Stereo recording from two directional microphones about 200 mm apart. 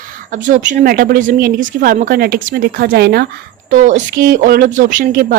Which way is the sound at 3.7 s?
40° right (ahead or behind).